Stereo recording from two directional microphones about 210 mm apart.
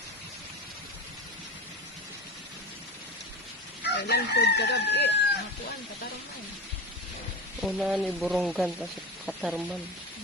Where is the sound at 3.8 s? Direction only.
55° left (ahead or behind).